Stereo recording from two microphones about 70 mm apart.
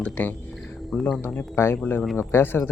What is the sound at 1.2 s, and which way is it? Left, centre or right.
Speech, left.